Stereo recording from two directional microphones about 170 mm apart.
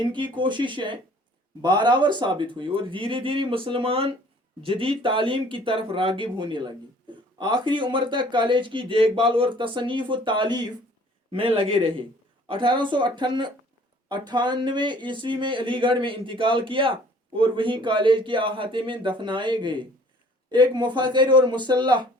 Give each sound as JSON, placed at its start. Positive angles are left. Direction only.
{"t": 0.0, "sound": "speech", "side_deg": -30}